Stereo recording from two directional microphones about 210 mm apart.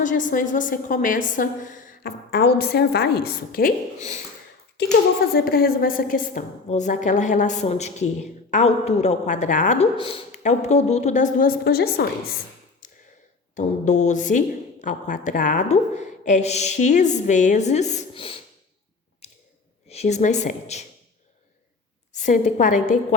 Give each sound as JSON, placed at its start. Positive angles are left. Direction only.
{"t": 0.0, "sound": "a woman's voice", "side_deg": 40}
{"t": 5.3, "sound": "a woman's voice", "side_deg": 45}
{"t": 13.6, "sound": "a woman's voice", "side_deg": 35}
{"t": 19.9, "sound": "a woman's voice", "side_deg": 30}
{"t": 22.1, "sound": "a woman's voice", "side_deg": 35}